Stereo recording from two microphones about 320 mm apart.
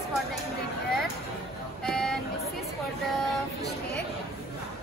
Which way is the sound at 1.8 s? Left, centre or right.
Centre.